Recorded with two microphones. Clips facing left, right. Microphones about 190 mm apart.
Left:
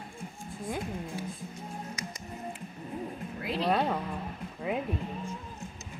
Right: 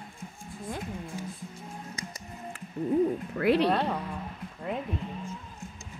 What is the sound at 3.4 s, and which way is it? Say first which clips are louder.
Speech: right 9 dB; 65° right (ahead or behind).